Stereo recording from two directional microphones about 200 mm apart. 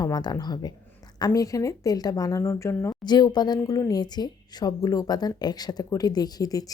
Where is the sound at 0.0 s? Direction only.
20° left (ahead or behind).